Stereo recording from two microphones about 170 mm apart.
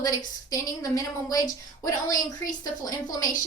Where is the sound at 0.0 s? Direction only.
20° left (ahead or behind).